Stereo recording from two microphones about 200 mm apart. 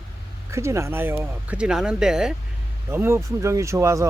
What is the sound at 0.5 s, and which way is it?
Speech, 15° right (ahead or behind).